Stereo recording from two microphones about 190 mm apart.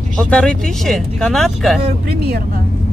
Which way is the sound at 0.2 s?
5° left (ahead or behind).